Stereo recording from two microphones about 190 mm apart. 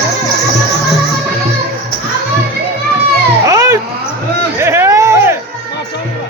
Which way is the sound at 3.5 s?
15° right (ahead or behind).